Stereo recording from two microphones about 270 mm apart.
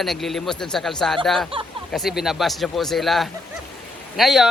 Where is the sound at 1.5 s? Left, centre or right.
Centre.